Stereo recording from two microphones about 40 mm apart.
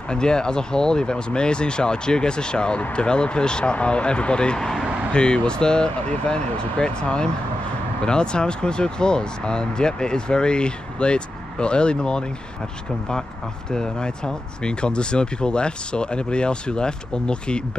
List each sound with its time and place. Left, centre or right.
0.1 s speech: centre
4.6 s speech: centre
5.1 s speech: left
13.7 s speech: centre